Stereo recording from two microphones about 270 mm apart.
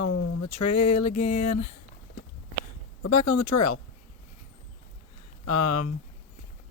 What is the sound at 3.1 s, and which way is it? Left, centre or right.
Speech, left.